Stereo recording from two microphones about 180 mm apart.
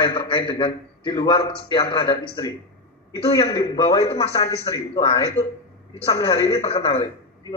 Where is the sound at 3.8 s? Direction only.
20° left (ahead or behind).